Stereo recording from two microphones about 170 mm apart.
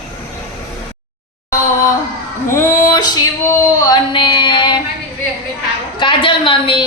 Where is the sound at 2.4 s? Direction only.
15° left (ahead or behind).